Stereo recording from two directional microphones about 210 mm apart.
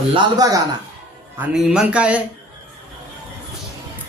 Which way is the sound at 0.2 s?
15° right (ahead or behind).